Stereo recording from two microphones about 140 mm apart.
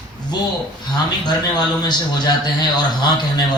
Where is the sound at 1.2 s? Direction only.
30° left (ahead or behind).